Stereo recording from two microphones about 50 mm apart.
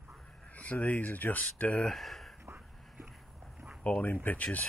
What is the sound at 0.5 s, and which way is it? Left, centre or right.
Speech, left.